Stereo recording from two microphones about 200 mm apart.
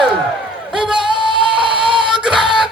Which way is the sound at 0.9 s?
25° right (ahead or behind).